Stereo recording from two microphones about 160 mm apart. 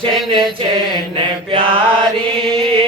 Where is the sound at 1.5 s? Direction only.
35° right (ahead or behind).